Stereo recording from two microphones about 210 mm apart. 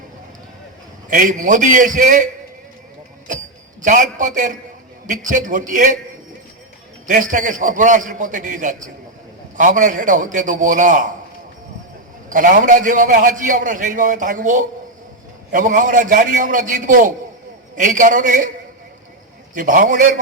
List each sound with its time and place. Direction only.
1.1 s a man's voice: 40° right (ahead or behind)
3.8 s a man's voice: 40° right (ahead or behind)
7.1 s a man's voice: 40° right (ahead or behind)
12.3 s a man's voice: 40° right (ahead or behind)
19.5 s a man's voice: 40° right (ahead or behind)